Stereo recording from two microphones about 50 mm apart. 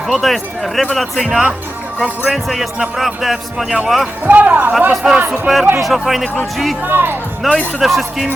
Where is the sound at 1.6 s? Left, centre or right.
Right.